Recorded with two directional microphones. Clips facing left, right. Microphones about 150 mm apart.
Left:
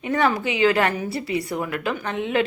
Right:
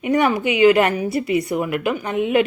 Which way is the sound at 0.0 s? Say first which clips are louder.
Right 4 dB; 15° right (ahead or behind).